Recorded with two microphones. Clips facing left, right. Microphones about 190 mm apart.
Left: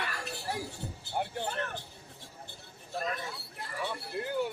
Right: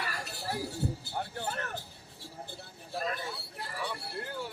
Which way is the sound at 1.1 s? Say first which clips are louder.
Left 3 dB; 15° left (ahead or behind).